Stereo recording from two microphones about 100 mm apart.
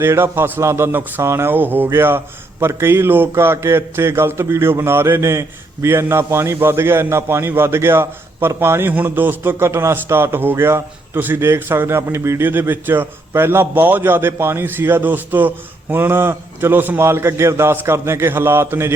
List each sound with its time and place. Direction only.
0.0 s speech: 25° right (ahead or behind)